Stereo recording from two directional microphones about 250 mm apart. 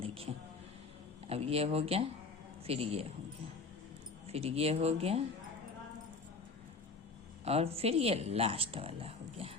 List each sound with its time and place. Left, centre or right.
0.0 s music: right
1.3 s speech: right
4.3 s speech: right
7.4 s speech: right